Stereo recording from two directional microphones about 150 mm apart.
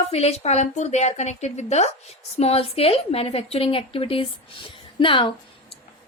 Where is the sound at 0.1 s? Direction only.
45° left (ahead or behind).